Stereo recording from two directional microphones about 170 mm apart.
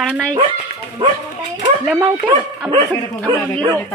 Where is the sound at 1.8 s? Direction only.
5° right (ahead or behind).